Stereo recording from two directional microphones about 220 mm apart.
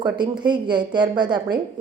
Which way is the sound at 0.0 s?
20° right (ahead or behind).